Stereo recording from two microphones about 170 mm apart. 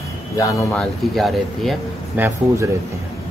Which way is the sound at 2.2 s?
10° right (ahead or behind).